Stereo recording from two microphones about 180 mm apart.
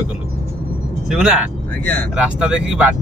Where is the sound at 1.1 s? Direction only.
5° right (ahead or behind).